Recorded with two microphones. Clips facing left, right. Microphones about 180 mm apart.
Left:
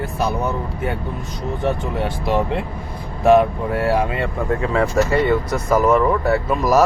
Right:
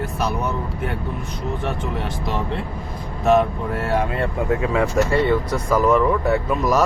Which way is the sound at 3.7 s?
Centre (ahead or behind).